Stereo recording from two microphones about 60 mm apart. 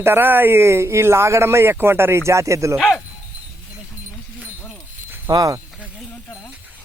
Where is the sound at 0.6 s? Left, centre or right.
Right.